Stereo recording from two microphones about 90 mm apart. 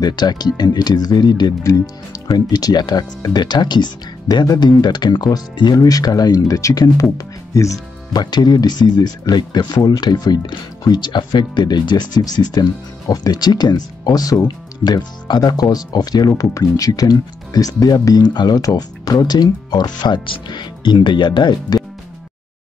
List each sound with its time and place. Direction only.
0.0 s speech: 50° left (ahead or behind)
8.1 s speech: 50° left (ahead or behind)